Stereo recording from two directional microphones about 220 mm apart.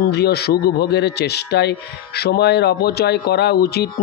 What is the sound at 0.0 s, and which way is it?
Speech, 50° left (ahead or behind).